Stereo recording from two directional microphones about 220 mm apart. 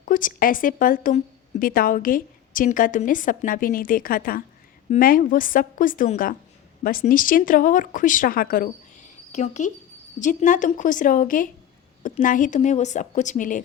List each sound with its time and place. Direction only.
0.0 s speech: 40° left (ahead or behind)